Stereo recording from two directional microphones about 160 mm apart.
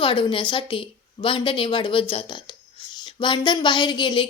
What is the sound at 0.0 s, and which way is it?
A woman's voice, 30° left (ahead or behind).